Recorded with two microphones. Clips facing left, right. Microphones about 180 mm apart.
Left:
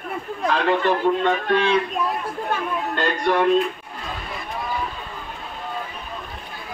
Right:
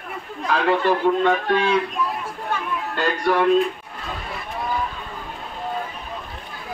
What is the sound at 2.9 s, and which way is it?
Speech, 5° right (ahead or behind).